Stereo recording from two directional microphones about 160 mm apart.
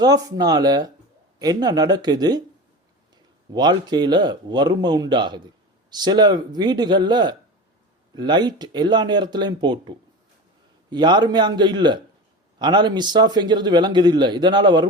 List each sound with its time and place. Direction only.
0.0 s a man's voice: 25° right (ahead or behind)
3.5 s a man's voice: 25° right (ahead or behind)